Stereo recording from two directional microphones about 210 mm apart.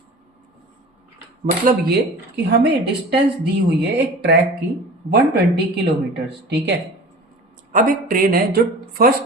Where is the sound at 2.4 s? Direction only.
50° right (ahead or behind).